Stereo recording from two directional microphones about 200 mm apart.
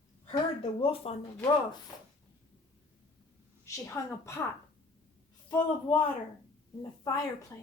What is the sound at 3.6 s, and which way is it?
Speech, 15° left (ahead or behind).